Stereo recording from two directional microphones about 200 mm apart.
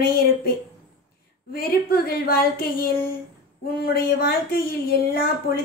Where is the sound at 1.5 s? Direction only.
50° left (ahead or behind).